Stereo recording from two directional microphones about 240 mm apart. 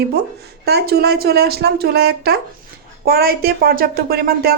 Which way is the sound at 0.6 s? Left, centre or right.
Right.